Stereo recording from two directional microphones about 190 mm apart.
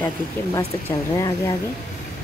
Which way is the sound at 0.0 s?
10° left (ahead or behind).